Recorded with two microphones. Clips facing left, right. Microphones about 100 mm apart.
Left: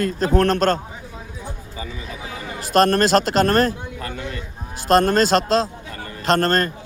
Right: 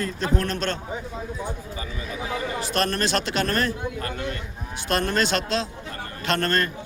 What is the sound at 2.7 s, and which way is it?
A man's voice, 45° left (ahead or behind).